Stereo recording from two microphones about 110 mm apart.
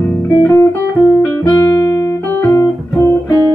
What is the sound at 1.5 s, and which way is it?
Music, 25° left (ahead or behind).